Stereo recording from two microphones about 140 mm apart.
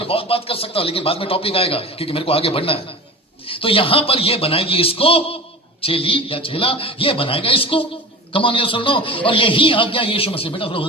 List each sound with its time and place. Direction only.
0.0 s a man's voice: 40° left (ahead or behind)